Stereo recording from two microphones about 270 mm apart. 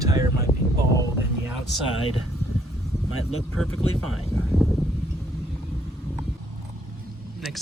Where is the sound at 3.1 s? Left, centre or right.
Left.